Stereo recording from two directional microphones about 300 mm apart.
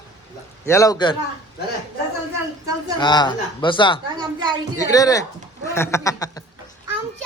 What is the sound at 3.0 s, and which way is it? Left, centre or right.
A man's voice, centre.